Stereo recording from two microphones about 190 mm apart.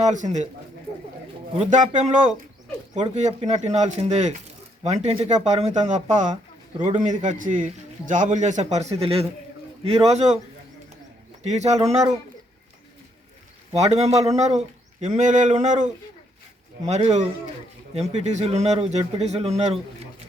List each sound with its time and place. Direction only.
0.0 s a man's voice: 40° right (ahead or behind)
1.5 s a man's voice: 40° right (ahead or behind)
3.2 s a man's voice: 35° right (ahead or behind)
6.7 s a man's voice: 25° right (ahead or behind)
7.0 s a man's voice: 40° right (ahead or behind)
11.4 s a man's voice: 35° right (ahead or behind)
14.0 s a man's voice: 35° right (ahead or behind)